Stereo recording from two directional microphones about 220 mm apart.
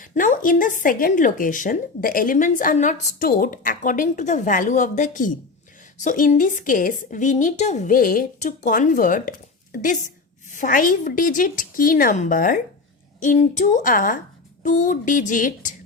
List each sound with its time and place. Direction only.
0.0 s speech: 35° left (ahead or behind)